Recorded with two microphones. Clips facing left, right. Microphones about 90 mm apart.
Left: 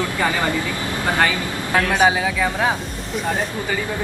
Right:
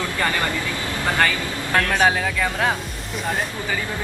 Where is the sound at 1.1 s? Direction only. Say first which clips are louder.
Left 1 dB; 10° left (ahead or behind).